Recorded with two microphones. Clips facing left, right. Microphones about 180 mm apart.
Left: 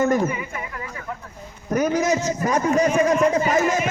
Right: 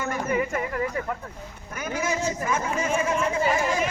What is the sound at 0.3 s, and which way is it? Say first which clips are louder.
Speech: right 4 dB; 55° right (ahead or behind).